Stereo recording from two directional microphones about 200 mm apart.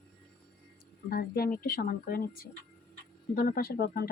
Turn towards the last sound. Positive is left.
turn(degrees=50)  # may be behind; listen again after turning